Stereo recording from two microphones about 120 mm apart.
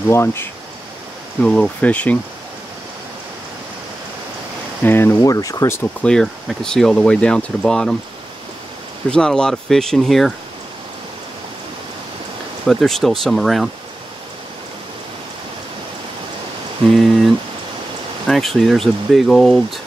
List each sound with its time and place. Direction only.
0.1 s speech: 20° left (ahead or behind)
1.4 s speech: 10° left (ahead or behind)
4.8 s speech: 20° left (ahead or behind)
6.0 s speech: 5° left (ahead or behind)
9.1 s speech: 5° left (ahead or behind)
12.6 s speech: centre (ahead or behind)
16.9 s rain: centre (ahead or behind)
18.2 s speech: centre (ahead or behind)